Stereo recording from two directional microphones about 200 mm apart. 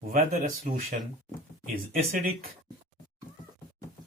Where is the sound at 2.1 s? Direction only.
45° right (ahead or behind).